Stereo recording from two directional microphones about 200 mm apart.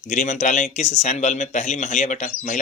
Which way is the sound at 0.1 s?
35° left (ahead or behind).